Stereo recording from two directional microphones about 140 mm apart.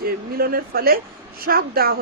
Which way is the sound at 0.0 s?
90° right.